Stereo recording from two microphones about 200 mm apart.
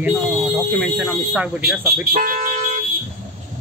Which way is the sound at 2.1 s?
40° right (ahead or behind).